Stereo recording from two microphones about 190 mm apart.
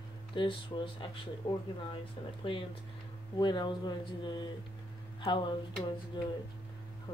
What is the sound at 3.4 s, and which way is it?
Speech, 25° left (ahead or behind).